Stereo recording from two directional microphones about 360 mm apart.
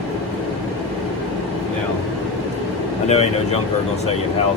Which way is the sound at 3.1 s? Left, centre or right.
Centre.